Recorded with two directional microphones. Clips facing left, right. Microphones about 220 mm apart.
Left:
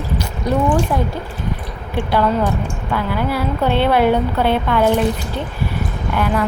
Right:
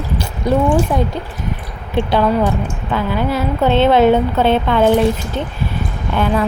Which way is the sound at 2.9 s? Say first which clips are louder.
Right 2 dB; 20° right (ahead or behind).